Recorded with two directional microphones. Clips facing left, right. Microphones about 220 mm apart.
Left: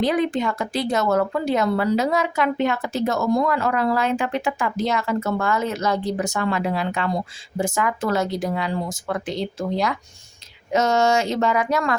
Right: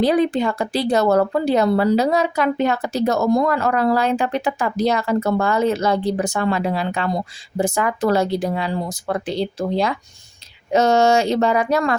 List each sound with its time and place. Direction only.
0.0 s speech: 35° right (ahead or behind)